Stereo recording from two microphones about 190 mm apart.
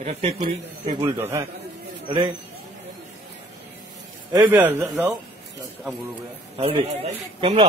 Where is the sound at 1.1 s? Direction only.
10° right (ahead or behind).